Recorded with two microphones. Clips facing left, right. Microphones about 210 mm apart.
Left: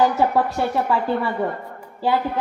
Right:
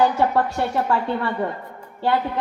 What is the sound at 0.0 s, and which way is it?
Speech, centre (ahead or behind).